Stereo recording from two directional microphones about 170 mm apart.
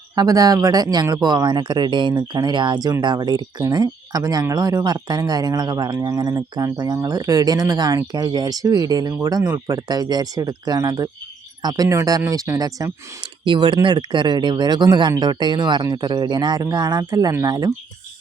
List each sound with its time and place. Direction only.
0.2 s speech: 20° right (ahead or behind)